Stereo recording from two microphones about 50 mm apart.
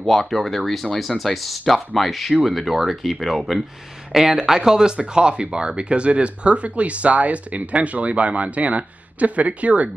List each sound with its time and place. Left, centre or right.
0.0 s speech: centre; by 9.8 s right